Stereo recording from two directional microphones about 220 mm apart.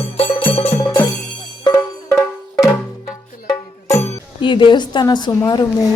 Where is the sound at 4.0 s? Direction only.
20° left (ahead or behind).